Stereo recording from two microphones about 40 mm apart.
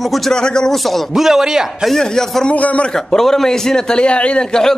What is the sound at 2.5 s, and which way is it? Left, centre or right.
Speech, left.